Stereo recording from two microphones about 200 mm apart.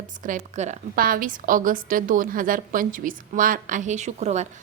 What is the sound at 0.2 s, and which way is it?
A woman's voice, 40° right (ahead or behind).